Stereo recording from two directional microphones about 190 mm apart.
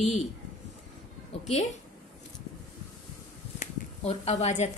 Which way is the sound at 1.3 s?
35° left (ahead or behind).